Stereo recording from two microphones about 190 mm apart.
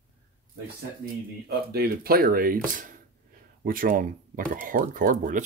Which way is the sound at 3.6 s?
50° right (ahead or behind).